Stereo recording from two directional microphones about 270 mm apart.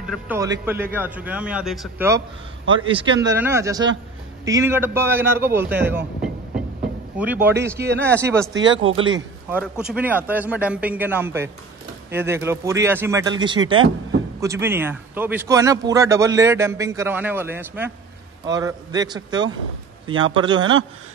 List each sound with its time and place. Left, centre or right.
0.0 s a man's voice: centre
8.5 s speech: right
9.5 s speech: centre